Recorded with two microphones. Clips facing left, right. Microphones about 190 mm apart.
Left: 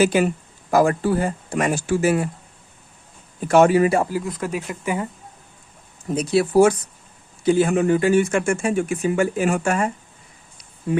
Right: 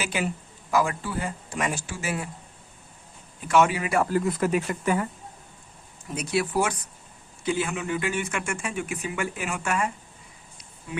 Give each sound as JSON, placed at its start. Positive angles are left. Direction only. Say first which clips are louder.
{"t": 0.0, "sound": "speech", "louder": "left 11 dB", "side_deg": 45}
{"t": 3.4, "sound": "speech", "louder": "left 8 dB", "side_deg": 45}
{"t": 4.1, "sound": "speech", "louder": "right 2 dB", "side_deg": 0}
{"t": 6.1, "sound": "speech", "louder": "left 9 dB", "side_deg": 30}